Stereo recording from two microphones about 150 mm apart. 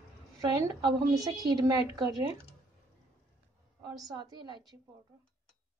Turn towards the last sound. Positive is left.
turn(degrees=-30)  # may be behind; listen again after turning